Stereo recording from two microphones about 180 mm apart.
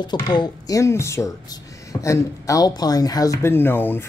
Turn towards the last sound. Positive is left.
turn(degrees=10)  # may be behind; listen again after turning